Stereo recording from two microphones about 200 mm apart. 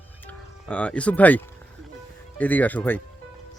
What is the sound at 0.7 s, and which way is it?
Speech, 5° left (ahead or behind).